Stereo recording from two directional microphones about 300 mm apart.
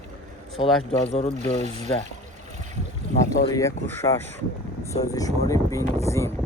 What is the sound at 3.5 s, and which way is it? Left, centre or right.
Speech, centre.